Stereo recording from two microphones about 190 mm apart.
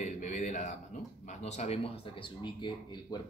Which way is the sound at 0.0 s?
40° left (ahead or behind).